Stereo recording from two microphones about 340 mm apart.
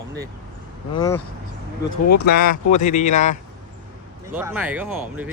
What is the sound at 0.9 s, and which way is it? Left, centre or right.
Speech, centre.